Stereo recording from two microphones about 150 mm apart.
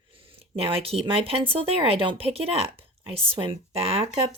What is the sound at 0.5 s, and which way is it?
Speech, 40° right (ahead or behind).